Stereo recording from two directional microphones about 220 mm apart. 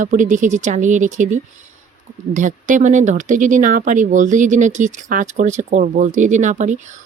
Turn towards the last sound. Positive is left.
turn(degrees=-35)  # may be behind; listen again after turning